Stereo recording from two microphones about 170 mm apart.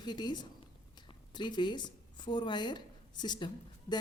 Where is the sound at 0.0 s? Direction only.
25° left (ahead or behind).